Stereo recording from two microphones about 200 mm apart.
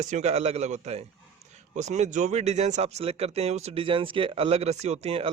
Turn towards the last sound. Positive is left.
turn(degrees=-30)  # may be behind; listen again after turning